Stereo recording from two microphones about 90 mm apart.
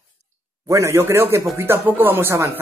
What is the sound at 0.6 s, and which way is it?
Speech, 35° right (ahead or behind).